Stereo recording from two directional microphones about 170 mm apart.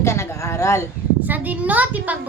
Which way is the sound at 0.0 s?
15° left (ahead or behind).